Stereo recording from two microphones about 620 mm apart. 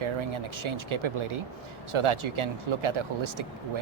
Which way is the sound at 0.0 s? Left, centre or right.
Right.